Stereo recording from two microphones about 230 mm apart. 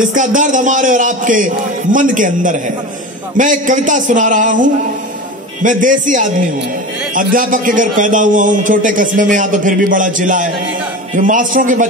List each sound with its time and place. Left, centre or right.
0.1 s a man's voice: right